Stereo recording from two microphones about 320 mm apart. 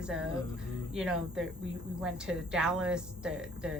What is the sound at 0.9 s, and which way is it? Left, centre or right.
Speech, centre.